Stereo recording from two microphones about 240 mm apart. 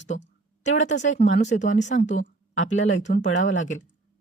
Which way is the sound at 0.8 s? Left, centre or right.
Left.